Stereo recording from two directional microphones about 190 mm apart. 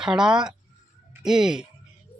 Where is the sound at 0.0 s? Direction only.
5° right (ahead or behind).